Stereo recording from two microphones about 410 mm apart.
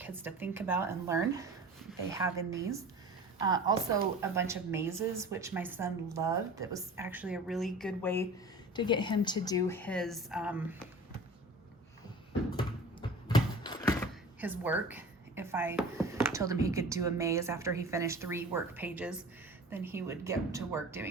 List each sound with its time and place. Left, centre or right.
0.0 s a woman's voice: centre
12.5 s a sound: centre
14.4 s a woman's voice: centre